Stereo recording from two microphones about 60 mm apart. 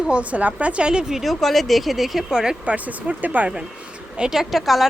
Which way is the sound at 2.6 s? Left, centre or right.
Right.